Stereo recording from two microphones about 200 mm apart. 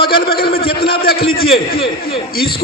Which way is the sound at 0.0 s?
50° left (ahead or behind).